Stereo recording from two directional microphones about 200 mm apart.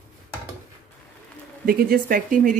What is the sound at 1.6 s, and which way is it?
Speech, 45° right (ahead or behind).